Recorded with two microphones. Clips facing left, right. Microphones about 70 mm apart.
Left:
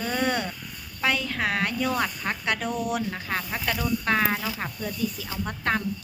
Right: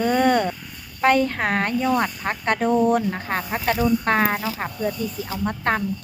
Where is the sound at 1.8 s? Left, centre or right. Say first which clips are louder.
Right 5 dB; right.